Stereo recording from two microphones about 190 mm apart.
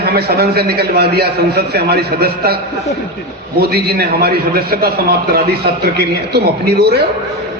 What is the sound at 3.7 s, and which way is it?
A man's voice, 55° right (ahead or behind).